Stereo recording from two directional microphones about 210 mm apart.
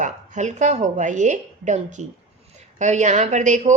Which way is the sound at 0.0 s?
35° right (ahead or behind).